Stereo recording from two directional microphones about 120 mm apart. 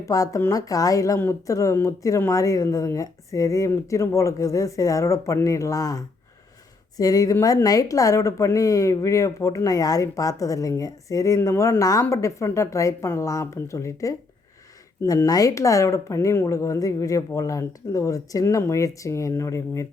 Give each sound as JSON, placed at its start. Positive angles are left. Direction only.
{"t": 0.0, "sound": "a woman's voice", "side_deg": 30}